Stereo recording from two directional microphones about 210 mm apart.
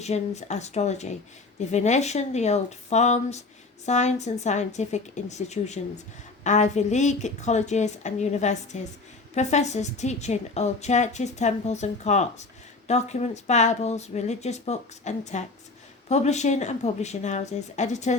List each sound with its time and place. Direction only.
0.0 s a woman's voice: 30° left (ahead or behind)